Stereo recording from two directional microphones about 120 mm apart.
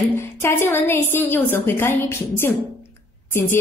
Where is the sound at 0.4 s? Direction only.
20° left (ahead or behind).